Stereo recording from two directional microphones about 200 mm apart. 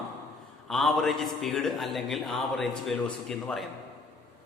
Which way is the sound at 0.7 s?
Centre (ahead or behind).